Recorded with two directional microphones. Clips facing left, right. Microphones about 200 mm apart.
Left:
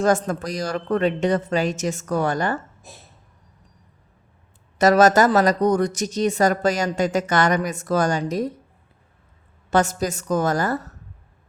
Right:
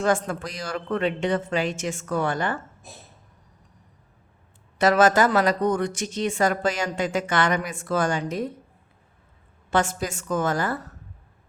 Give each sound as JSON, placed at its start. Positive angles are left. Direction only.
{"t": 0.0, "sound": "speech", "side_deg": 40}
{"t": 4.8, "sound": "speech", "side_deg": 40}
{"t": 9.6, "sound": "speech", "side_deg": 40}